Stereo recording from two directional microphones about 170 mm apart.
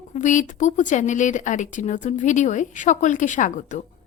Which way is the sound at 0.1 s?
45° left (ahead or behind).